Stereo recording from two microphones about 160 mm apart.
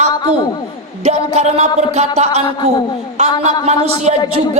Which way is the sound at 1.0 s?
40° right (ahead or behind).